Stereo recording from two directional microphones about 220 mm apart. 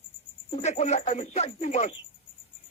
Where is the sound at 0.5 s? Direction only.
30° left (ahead or behind).